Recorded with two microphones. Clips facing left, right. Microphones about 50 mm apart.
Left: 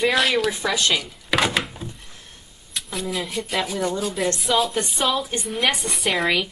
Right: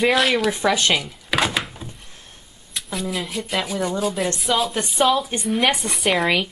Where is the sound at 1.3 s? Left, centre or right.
Centre.